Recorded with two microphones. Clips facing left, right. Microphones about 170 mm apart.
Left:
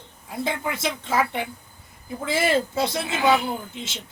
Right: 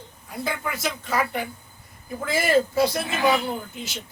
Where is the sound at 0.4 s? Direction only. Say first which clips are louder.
Left 1 dB; 25° left (ahead or behind).